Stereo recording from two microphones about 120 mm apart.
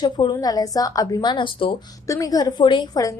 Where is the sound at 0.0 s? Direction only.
40° left (ahead or behind).